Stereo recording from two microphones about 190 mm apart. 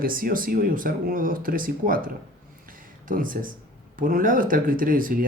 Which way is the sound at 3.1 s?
45° right (ahead or behind).